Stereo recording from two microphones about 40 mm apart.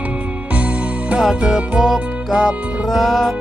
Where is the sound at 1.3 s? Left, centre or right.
Centre.